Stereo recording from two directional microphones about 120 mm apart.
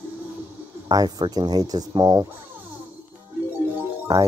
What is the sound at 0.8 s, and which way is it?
Speech, 35° right (ahead or behind).